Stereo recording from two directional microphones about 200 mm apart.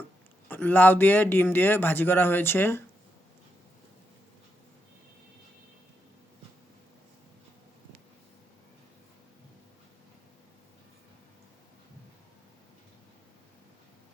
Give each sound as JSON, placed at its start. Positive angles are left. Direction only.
{"t": 0.4, "sound": "speech", "side_deg": 10}